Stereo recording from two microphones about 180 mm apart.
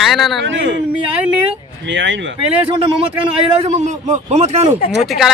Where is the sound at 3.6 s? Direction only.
40° right (ahead or behind).